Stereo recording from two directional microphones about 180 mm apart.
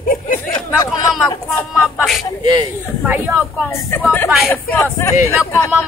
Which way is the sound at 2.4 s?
25° right (ahead or behind).